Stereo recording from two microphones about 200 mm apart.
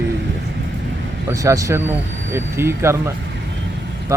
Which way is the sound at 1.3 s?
15° right (ahead or behind).